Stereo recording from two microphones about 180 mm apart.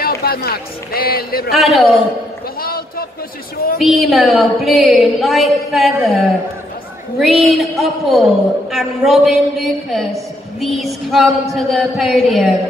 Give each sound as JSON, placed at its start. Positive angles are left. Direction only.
{"t": 0.0, "sound": "a man's voice", "side_deg": 60}
{"t": 1.5, "sound": "a woman's voice", "side_deg": 0}
{"t": 2.6, "sound": "a sound", "side_deg": 55}
{"t": 3.8, "sound": "a woman's voice", "side_deg": 0}